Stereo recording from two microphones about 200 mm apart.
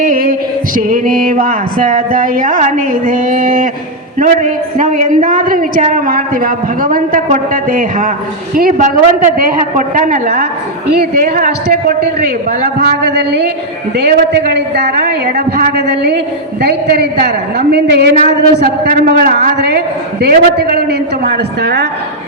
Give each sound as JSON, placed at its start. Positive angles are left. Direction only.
{"t": 0.0, "sound": "a man's voice", "side_deg": -45}
{"t": 14.5, "sound": "a man's voice", "side_deg": -55}